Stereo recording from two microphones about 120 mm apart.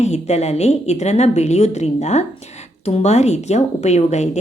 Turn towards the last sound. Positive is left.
turn(degrees=70)  # may be behind; listen again after turning